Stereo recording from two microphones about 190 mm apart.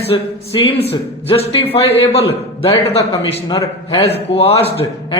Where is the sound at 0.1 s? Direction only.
30° left (ahead or behind).